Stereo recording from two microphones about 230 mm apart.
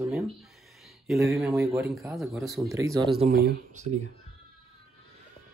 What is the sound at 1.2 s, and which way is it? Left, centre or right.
Mantra, centre.